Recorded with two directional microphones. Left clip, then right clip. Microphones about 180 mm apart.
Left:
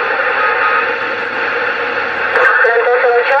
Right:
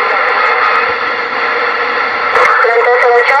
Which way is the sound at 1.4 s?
50° right (ahead or behind).